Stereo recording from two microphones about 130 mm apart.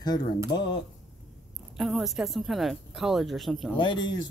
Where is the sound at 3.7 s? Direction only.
40° left (ahead or behind).